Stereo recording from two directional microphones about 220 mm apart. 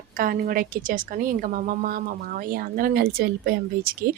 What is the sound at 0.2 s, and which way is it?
Speech, 40° right (ahead or behind).